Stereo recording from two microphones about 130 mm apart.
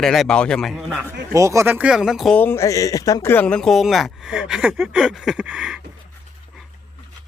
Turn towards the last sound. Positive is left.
turn(degrees=-10)  # may be behind; listen again after turning